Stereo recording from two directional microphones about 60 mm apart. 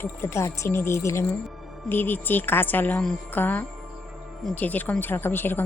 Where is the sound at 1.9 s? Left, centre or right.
Left.